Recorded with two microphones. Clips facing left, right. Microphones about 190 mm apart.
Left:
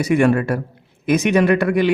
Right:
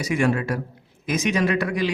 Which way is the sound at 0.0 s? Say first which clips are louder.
Left 6 dB; 60° left (ahead or behind).